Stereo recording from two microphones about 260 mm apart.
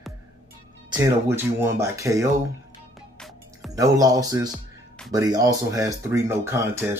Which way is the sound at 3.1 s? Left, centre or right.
Centre.